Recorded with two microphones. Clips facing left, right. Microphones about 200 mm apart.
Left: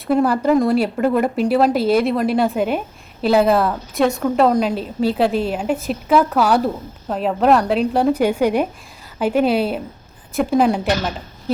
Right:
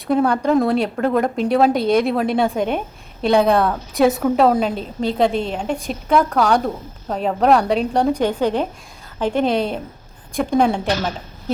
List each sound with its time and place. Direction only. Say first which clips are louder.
0.1 s a woman's voice: left 1 dB; 5° left (ahead or behind)